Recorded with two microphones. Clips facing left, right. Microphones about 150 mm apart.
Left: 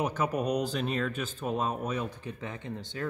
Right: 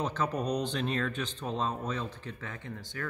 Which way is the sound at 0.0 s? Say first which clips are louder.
Left 2 dB; 10° left (ahead or behind).